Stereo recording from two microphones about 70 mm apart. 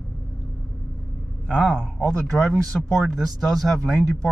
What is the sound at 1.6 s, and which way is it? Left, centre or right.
A man's voice, centre.